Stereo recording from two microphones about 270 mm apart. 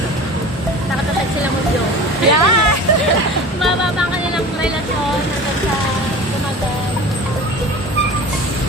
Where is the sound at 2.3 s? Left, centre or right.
Right.